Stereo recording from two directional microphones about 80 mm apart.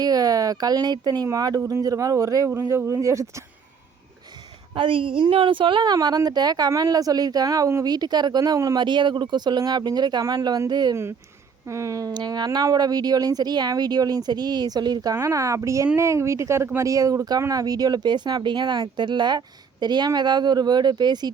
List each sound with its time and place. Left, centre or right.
0.0 s speech: right
2.5 s speech: right
4.7 s a woman's voice: right
8.8 s speech: right
11.6 s speech: right
12.1 s speech: right
15.1 s speech: right